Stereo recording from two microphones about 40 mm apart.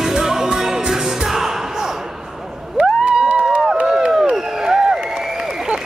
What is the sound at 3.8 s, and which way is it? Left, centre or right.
Run, right.